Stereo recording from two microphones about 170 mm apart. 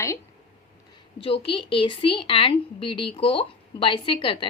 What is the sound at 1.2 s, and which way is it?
A woman's voice, 30° left (ahead or behind).